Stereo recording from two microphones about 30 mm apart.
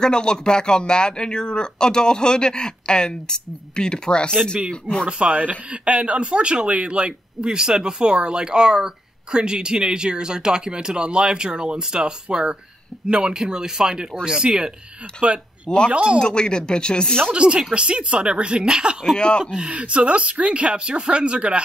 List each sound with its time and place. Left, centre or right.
0.0 s speech: left
5.3 s speech: right
5.7 s speech: right
13.3 s speech: right
15.2 s speech: right
16.2 s speech: left
17.3 s speech: right
19.1 s speech: left
19.4 s speech: right
19.7 s speech: right